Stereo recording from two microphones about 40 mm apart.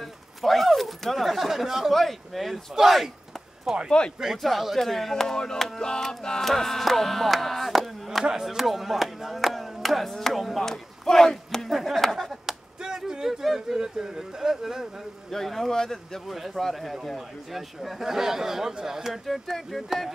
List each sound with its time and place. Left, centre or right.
0.0 s a sound: centre
1.9 s speech: centre
3.6 s speech: centre
4.4 s speech: centre
5.1 s music: centre
11.7 s a sound: centre
12.3 s a sound: centre
13.7 s a man's voice: centre
15.3 s speech: centre
15.7 s music: centre
16.3 s a man's voice: centre